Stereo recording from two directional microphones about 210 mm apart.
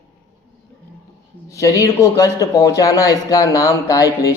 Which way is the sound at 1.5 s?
15° left (ahead or behind).